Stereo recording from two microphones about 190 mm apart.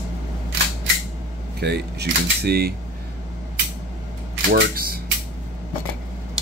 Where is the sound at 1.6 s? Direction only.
60° right (ahead or behind).